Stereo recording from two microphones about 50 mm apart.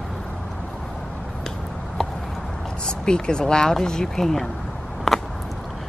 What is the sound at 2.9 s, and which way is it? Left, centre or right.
Speech, centre.